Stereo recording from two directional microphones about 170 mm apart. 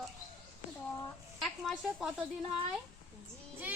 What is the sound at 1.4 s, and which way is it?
Speech, centre (ahead or behind).